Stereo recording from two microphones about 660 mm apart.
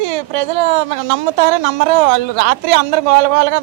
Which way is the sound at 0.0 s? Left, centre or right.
Right.